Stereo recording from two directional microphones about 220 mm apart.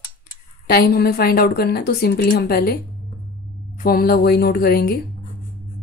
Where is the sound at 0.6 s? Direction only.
45° left (ahead or behind).